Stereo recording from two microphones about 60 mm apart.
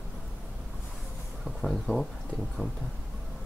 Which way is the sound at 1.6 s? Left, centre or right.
Centre.